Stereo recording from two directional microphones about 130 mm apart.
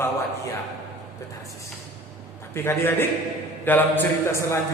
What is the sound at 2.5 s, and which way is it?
A man's voice, 20° left (ahead or behind).